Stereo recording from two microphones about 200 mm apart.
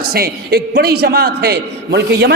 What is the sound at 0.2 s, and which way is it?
A man's voice, 50° right (ahead or behind).